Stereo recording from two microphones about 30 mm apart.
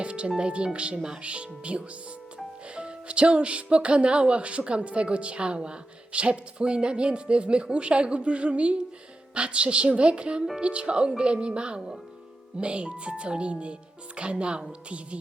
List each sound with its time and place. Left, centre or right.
0.0 s music: right
0.3 s speech: right
0.9 s speech: right
1.2 s speech: right